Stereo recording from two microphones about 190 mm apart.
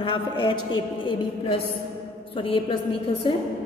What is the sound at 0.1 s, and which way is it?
A man's voice, 25° left (ahead or behind).